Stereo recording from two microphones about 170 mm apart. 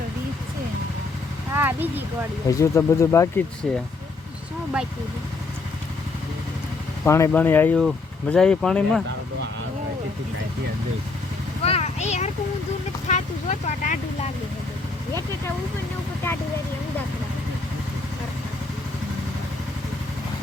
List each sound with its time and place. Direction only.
1.5 s speech: 10° right (ahead or behind)
2.5 s speech: 15° left (ahead or behind)
3.6 s speech: centre (ahead or behind)
7.0 s speech: 15° left (ahead or behind)
11.6 s speech: 40° left (ahead or behind)
13.1 s a sound: 45° left (ahead or behind)